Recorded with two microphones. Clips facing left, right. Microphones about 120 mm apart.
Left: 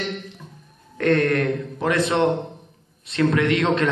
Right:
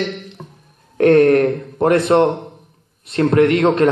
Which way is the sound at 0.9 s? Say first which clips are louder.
Right 8 dB; 55° right (ahead or behind).